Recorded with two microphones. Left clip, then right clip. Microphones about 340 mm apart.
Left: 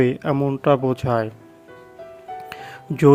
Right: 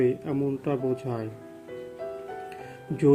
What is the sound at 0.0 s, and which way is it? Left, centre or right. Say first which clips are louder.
Speech: left 6 dB; left.